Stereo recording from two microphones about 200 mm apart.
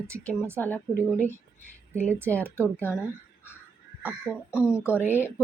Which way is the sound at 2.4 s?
10° right (ahead or behind).